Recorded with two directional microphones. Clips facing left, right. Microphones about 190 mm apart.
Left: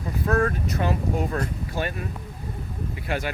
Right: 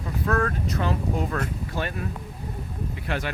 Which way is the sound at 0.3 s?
30° left (ahead or behind).